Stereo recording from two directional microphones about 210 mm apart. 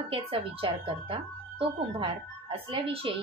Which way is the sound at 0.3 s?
25° right (ahead or behind).